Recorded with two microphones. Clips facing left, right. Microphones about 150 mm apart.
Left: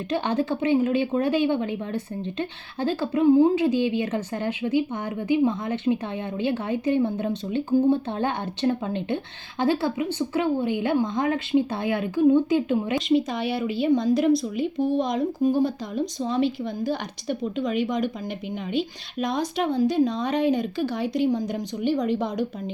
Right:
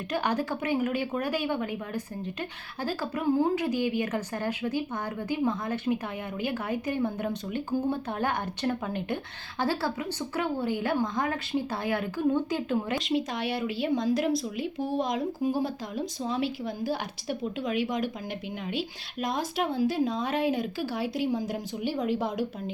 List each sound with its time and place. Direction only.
0.1 s speech: 25° left (ahead or behind)
13.1 s speech: centre (ahead or behind)